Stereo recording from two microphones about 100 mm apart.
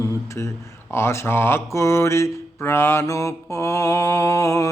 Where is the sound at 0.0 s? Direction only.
30° left (ahead or behind).